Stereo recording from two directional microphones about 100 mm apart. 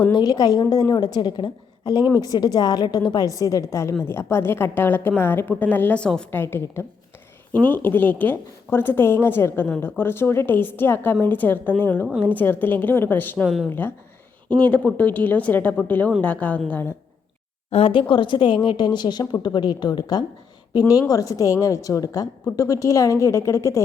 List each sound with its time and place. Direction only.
0.1 s a woman's voice: 40° left (ahead or behind); by 6.2 s 10° left (ahead or behind)
6.3 s a woman's voice: 25° left (ahead or behind)
13.4 s speech: centre (ahead or behind)
13.7 s a woman's voice: 20° left (ahead or behind)
17.7 s speech: 85° left
17.9 s a woman's voice: 55° left (ahead or behind); by 23.8 s 30° left (ahead or behind)